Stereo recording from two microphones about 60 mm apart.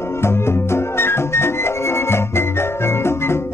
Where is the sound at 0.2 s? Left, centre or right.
Left.